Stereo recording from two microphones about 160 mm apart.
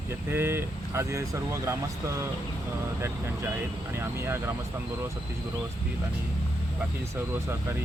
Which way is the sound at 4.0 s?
15° right (ahead or behind).